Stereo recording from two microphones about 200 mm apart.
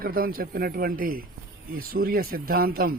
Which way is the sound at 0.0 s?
45° right (ahead or behind).